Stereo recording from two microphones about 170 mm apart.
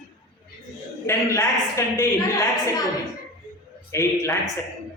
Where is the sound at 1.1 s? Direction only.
15° left (ahead or behind).